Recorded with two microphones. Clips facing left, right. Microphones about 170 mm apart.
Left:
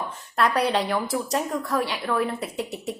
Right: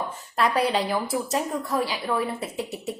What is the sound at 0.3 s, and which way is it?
A woman's voice, centre (ahead or behind).